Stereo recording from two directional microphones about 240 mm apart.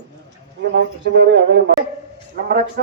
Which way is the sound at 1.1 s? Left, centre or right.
Right.